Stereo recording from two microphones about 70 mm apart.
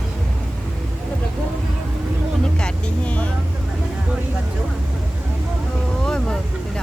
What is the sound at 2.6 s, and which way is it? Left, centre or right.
Vehicle, centre.